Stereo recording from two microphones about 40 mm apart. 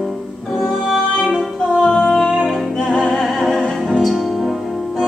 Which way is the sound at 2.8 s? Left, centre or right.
Left.